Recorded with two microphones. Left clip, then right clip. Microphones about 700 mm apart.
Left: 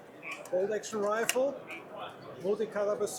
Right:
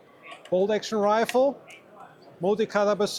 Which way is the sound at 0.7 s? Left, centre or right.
Right.